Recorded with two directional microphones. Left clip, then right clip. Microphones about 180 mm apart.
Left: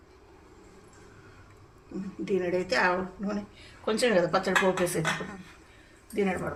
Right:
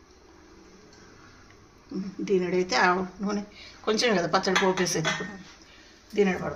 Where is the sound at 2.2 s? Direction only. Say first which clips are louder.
Right 3 dB; 60° right (ahead or behind).